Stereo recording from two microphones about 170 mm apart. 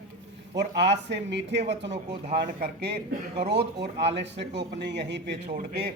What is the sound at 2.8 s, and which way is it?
Speech, 70° right (ahead or behind).